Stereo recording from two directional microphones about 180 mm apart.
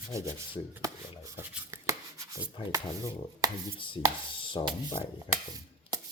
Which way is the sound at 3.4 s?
20° right (ahead or behind).